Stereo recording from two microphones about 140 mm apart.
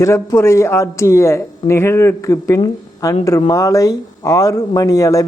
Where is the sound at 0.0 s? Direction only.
20° left (ahead or behind).